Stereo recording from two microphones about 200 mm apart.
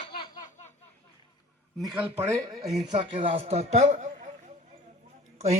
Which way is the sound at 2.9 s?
25° right (ahead or behind).